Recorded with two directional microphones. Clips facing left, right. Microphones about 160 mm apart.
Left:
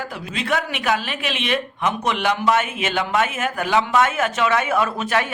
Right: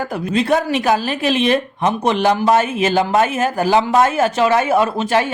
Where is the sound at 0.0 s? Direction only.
50° right (ahead or behind).